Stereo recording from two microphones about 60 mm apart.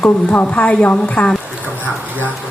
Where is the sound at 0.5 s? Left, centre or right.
Left.